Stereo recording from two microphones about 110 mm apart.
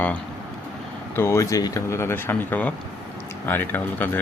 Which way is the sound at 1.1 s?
25° left (ahead or behind).